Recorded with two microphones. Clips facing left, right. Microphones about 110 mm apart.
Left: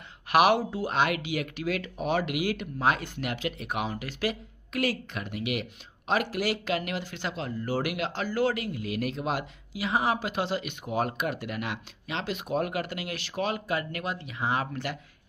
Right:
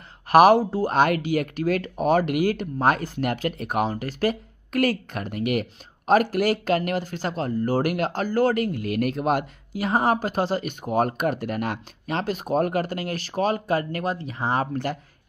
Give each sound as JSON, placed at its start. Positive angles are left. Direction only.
{"t": 0.3, "sound": "speech", "side_deg": -40}